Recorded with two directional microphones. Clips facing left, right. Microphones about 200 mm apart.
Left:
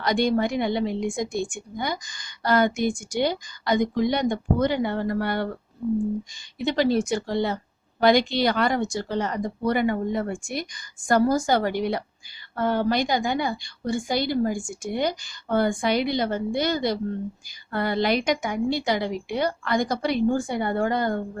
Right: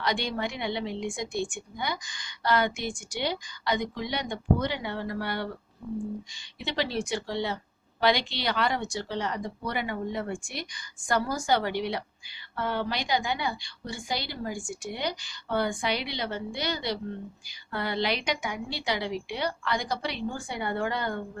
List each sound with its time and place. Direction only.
0.0 s a woman's voice: 45° left (ahead or behind)
6.6 s a woman's voice: 45° left (ahead or behind)